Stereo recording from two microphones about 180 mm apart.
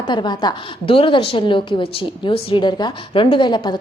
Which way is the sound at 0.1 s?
25° left (ahead or behind).